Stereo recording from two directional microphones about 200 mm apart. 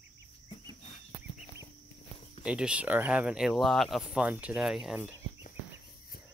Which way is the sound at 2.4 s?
5° right (ahead or behind).